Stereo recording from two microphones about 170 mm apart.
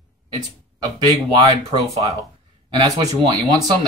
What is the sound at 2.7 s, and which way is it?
Speech, 20° right (ahead or behind).